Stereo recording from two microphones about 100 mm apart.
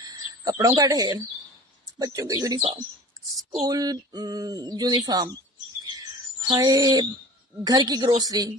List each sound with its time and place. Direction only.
0.0 s a sound: 40° right (ahead or behind)
0.8 s speech: 35° right (ahead or behind)
3.6 s speech: 40° right (ahead or behind)
6.5 s speech: 40° right (ahead or behind)